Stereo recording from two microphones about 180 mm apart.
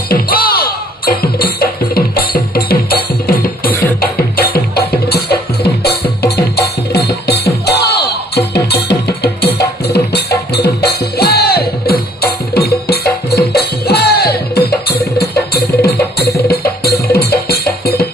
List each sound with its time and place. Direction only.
0.1 s music: 55° left (ahead or behind)